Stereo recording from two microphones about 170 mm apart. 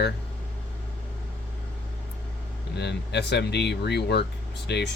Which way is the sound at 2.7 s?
80° left.